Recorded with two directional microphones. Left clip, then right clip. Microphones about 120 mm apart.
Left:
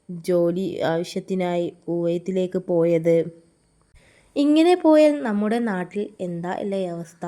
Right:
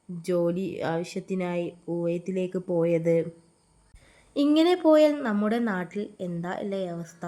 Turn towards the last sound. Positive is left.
turn(degrees=35)  # may be behind; listen again after turning